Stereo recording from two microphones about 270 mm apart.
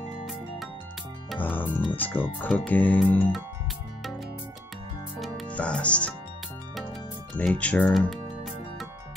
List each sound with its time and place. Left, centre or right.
1.6 s speech: centre
5.2 s music: centre
7.3 s music: centre